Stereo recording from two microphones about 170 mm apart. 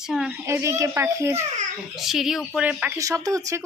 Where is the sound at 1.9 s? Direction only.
Centre (ahead or behind); by 3.6 s 20° right (ahead or behind).